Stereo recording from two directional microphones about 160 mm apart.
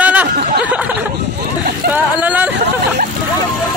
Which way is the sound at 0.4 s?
90° right.